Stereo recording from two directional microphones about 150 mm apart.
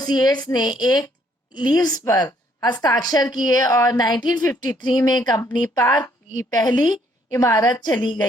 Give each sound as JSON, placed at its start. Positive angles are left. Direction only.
{"t": 0.0, "sound": "speech", "side_deg": 25}